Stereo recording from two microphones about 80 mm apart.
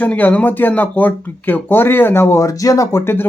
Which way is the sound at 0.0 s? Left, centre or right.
Left.